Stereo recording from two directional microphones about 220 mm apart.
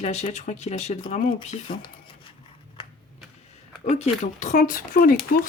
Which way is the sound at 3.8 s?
30° left (ahead or behind).